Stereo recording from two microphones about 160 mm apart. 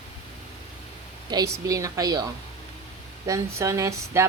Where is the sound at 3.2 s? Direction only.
20° right (ahead or behind).